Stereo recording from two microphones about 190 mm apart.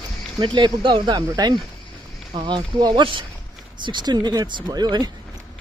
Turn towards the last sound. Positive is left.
turn(degrees=-20)  # may be behind; listen again after turning